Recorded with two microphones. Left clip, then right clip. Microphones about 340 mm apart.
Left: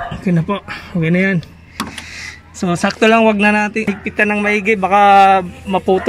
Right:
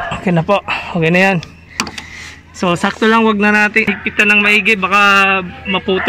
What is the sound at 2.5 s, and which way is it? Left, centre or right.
Speech, centre.